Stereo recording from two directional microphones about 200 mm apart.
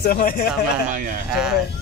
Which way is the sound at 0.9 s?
45° right (ahead or behind).